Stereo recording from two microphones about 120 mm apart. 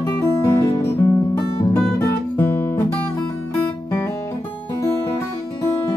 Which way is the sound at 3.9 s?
20° left (ahead or behind).